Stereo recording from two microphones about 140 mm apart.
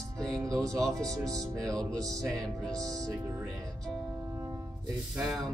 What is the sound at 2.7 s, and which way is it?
Speech, 25° right (ahead or behind).